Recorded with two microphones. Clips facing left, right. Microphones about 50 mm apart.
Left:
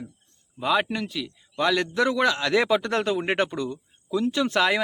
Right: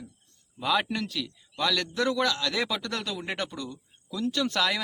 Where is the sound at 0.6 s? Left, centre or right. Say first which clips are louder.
Left 3 dB; centre.